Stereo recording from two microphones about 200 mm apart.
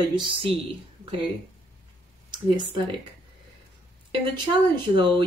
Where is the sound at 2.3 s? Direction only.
25° right (ahead or behind).